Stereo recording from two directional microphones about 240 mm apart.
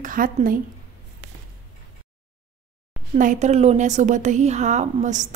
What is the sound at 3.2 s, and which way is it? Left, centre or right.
A woman's voice, right.